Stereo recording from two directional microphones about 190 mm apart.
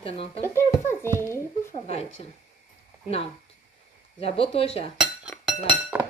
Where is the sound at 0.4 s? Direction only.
10° left (ahead or behind).